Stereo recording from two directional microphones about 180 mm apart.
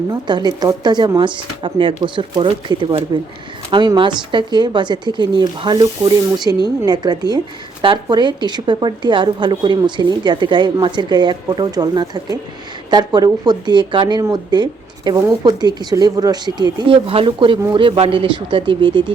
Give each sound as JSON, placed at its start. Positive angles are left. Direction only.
{"t": 0.1, "sound": "speech", "side_deg": -25}